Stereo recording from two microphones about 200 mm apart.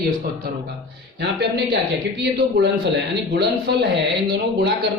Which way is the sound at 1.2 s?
55° right (ahead or behind).